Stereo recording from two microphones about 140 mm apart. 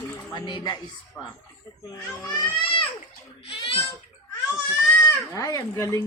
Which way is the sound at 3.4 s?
40° left (ahead or behind).